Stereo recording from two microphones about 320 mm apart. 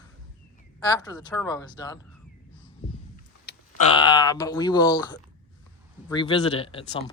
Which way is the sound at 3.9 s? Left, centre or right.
Centre.